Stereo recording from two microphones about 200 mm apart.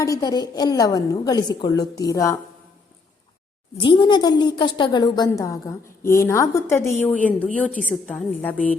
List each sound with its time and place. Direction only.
0.0 s a woman's voice: 20° left (ahead or behind)
3.8 s a woman's voice: 25° left (ahead or behind); by 8.5 s 5° left (ahead or behind)